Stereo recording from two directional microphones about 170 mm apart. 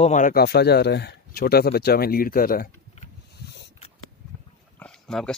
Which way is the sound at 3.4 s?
90° left.